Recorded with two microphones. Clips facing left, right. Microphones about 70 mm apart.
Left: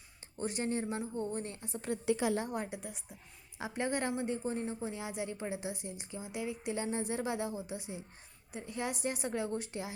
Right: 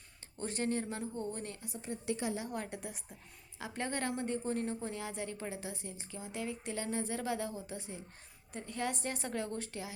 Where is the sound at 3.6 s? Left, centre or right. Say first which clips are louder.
Left 3 dB; centre.